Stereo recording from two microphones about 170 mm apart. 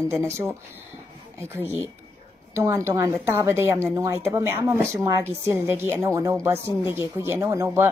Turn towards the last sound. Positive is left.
turn(degrees=-15)  # may be behind; listen again after turning